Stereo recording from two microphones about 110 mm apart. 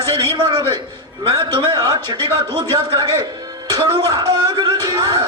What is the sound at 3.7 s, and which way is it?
Speech, 35° right (ahead or behind).